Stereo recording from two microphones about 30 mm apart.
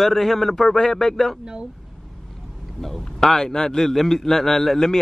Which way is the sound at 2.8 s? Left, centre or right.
Centre.